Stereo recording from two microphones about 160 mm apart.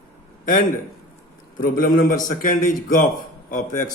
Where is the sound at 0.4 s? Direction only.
55° left (ahead or behind).